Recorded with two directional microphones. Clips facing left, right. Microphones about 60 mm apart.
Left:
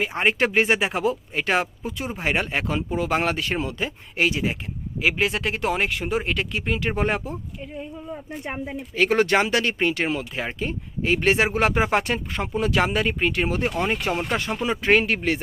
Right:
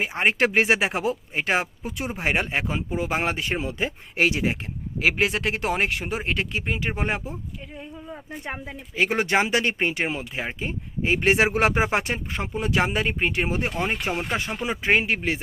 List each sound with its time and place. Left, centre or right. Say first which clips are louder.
0.3 s speech: even; right
3.6 s speech: even; right
6.9 s speech: left 3 dB; centre
9.0 s speech: left 3 dB; centre; by 11.7 s right
11.7 s speech: left 2 dB; centre
13.0 s speech: left 2 dB; right